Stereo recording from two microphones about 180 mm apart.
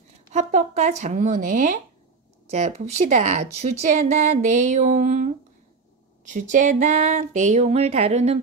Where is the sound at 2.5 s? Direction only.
40° right (ahead or behind).